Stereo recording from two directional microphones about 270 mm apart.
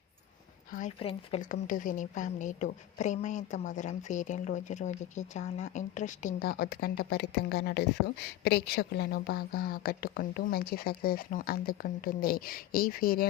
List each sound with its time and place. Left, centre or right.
0.7 s a woman's voice: left